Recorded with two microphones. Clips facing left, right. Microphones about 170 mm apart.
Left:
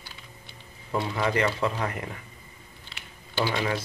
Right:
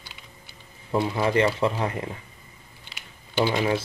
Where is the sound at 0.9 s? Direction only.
25° right (ahead or behind).